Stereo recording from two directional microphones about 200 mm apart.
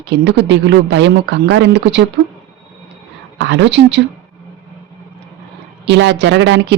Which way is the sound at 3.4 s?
60° right (ahead or behind).